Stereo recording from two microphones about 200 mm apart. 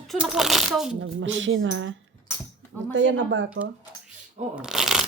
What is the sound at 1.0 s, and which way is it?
Speech, 70° right (ahead or behind).